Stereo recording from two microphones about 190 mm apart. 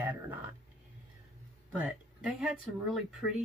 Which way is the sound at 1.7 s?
5° right (ahead or behind).